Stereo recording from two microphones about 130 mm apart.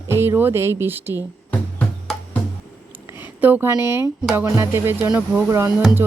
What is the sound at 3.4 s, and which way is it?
Speech, 15° right (ahead or behind).